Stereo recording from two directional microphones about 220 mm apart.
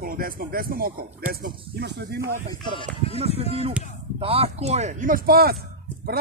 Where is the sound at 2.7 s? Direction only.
25° left (ahead or behind).